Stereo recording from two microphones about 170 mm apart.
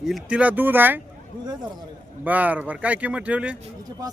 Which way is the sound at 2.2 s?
10° right (ahead or behind).